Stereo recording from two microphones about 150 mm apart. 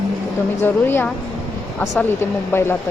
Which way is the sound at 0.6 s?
15° left (ahead or behind).